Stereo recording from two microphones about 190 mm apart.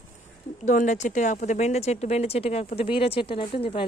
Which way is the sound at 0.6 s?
40° left (ahead or behind).